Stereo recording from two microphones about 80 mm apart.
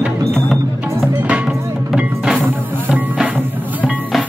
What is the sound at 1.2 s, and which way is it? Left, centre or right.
Music, centre.